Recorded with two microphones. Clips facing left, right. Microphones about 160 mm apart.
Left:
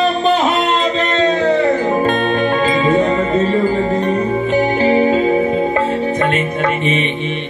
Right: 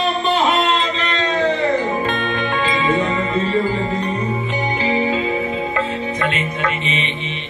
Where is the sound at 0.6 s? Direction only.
45° left (ahead or behind).